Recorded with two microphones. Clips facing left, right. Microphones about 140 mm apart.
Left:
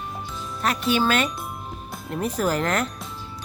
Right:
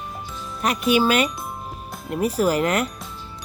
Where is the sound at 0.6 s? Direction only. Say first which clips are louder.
Right 3 dB; 10° right (ahead or behind).